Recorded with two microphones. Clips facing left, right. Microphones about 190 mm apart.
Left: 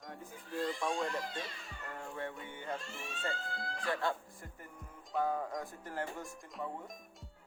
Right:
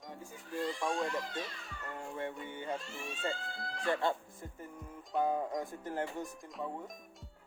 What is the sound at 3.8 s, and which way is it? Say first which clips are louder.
Speech: right 3 dB; 25° right (ahead or behind).